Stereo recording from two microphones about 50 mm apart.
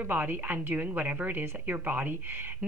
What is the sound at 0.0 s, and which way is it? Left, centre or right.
A woman's voice, right.